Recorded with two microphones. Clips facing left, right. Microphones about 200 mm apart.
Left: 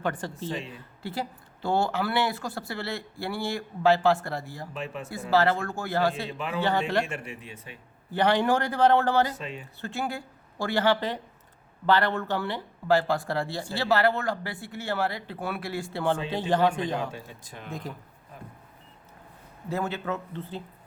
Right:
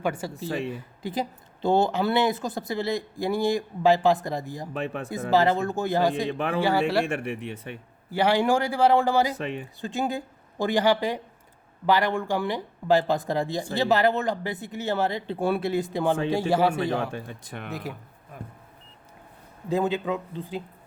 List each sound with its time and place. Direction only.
0.0 s speech: 10° right (ahead or behind)
6.3 s speech: 55° right (ahead or behind)
6.6 s speech: 10° right (ahead or behind)
7.0 s speech: 60° right (ahead or behind)
8.1 s speech: 10° right (ahead or behind)
17.1 s speech: 60° right (ahead or behind)
19.7 s speech: 15° right (ahead or behind)